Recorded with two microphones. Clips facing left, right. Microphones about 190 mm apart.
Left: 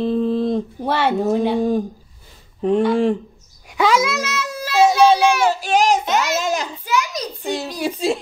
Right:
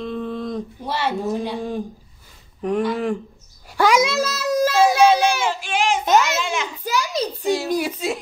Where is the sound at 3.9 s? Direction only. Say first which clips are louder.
Right 1 dB; 25° right (ahead or behind).